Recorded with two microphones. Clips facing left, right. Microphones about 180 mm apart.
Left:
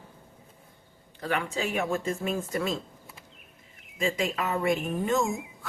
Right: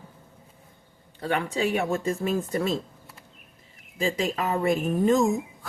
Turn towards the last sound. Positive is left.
turn(degrees=-35)  # may be behind; listen again after turning